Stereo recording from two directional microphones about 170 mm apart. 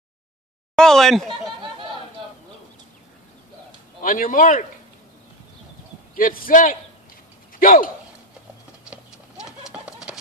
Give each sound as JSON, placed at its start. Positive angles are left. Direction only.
{"t": 0.7, "sound": "speech", "side_deg": 5}
{"t": 4.0, "sound": "speech", "side_deg": 55}
{"t": 6.1, "sound": "speech", "side_deg": 55}
{"t": 8.8, "sound": "a sound", "side_deg": -5}